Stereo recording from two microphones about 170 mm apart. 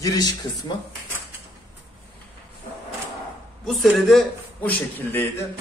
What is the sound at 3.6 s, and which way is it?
Speech, centre (ahead or behind).